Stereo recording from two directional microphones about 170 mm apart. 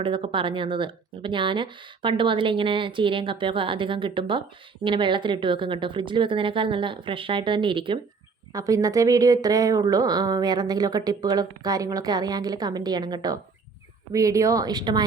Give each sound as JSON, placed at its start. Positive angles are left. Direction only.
{"t": 0.0, "sound": "speech", "side_deg": -30}